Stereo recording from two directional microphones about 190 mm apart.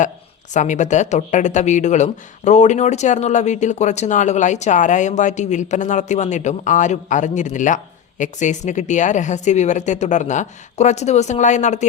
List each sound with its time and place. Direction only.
0.5 s speech: 40° left (ahead or behind)